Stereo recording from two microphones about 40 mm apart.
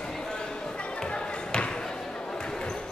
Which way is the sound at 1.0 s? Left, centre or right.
Centre.